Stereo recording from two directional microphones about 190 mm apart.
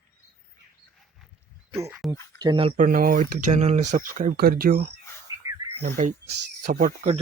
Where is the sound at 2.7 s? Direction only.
45° right (ahead or behind).